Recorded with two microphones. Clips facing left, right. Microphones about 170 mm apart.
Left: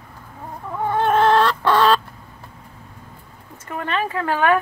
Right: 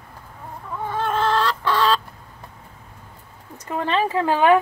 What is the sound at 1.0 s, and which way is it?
Chicken, 60° left (ahead or behind).